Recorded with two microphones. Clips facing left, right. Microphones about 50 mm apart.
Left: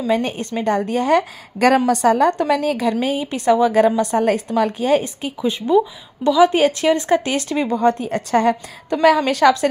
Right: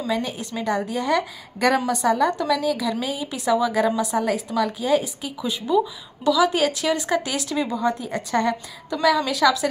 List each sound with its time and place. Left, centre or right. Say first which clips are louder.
0.1 s a woman's voice: left 7 dB; left
2.9 s a woman's voice: left 6 dB; left
5.4 s a woman's voice: left 5 dB; left
7.7 s a woman's voice: left 6 dB; left
8.9 s a woman's voice: left 6 dB; left